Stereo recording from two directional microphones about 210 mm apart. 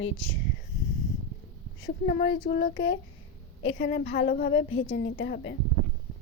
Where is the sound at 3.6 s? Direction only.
60° left (ahead or behind).